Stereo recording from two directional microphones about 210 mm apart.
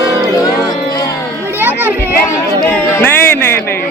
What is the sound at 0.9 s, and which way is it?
Music, 15° left (ahead or behind).